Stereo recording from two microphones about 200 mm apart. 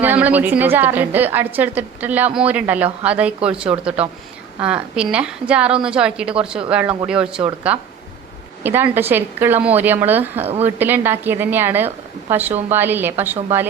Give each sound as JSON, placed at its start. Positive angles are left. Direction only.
{"t": 0.0, "sound": "a woman's voice", "side_deg": -10}